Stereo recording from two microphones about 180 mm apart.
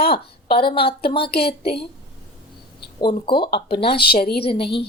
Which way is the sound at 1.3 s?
60° left (ahead or behind).